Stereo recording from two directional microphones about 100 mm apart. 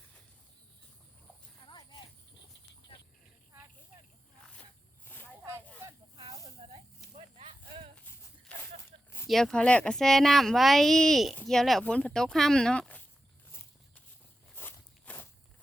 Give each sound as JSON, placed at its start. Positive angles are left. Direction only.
{"t": 1.6, "sound": "clip-clop", "side_deg": 40}
{"t": 5.0, "sound": "a sound", "side_deg": 20}
{"t": 6.6, "sound": "a sound", "side_deg": -75}
{"t": 7.9, "sound": "horse", "side_deg": 15}
{"t": 9.2, "sound": "speech", "side_deg": 5}
{"t": 14.5, "sound": "walk", "side_deg": 20}